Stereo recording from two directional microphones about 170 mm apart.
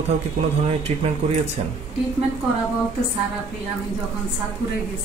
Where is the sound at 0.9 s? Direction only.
40° right (ahead or behind).